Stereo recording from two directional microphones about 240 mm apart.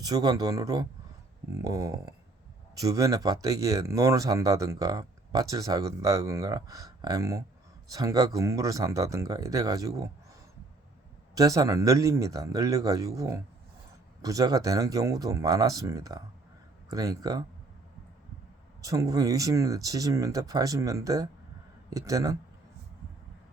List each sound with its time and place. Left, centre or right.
0.0 s speech: centre
11.3 s speech: centre
18.8 s speech: centre